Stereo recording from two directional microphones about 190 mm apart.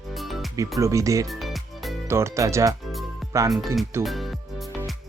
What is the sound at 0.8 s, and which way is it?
Speech, 15° right (ahead or behind).